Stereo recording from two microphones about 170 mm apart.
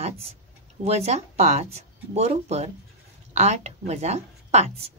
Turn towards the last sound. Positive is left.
turn(degrees=-40)  # may be behind; listen again after turning